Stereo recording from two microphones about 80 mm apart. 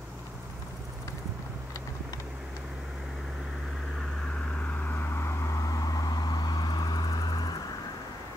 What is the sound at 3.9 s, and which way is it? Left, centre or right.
Vehicle, centre.